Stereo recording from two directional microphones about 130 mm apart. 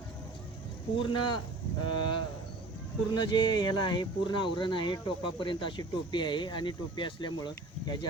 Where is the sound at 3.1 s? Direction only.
35° left (ahead or behind).